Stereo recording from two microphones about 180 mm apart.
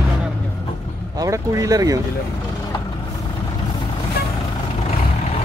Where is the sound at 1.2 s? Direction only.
15° right (ahead or behind).